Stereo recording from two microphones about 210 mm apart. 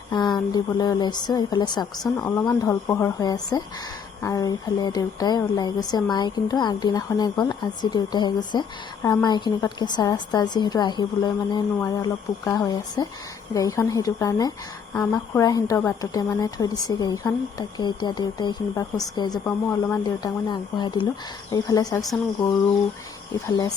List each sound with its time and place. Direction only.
0.1 s a woman's voice: 20° left (ahead or behind)